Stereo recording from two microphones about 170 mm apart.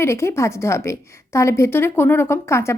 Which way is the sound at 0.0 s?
15° left (ahead or behind).